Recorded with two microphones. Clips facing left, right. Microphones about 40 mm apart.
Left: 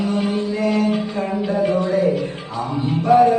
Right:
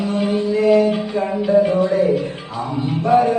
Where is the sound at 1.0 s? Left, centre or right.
Centre.